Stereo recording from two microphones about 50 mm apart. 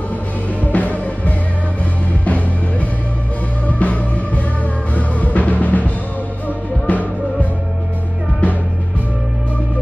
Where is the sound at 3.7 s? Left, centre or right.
Left.